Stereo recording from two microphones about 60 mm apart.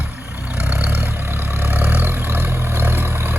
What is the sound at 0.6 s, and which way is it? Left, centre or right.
Vehicle, right.